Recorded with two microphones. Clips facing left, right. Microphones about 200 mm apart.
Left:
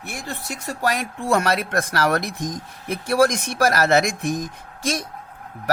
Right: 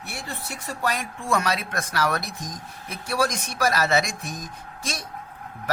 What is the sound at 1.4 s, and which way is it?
Speech, 50° left (ahead or behind).